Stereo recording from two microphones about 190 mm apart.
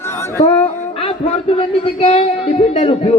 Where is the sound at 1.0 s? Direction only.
30° left (ahead or behind).